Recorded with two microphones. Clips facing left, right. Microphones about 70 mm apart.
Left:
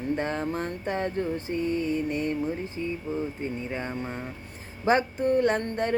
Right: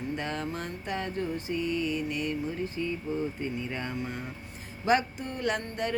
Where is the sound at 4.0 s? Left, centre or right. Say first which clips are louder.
Left 2 dB; left.